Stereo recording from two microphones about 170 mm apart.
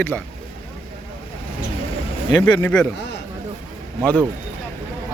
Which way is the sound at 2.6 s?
10° left (ahead or behind).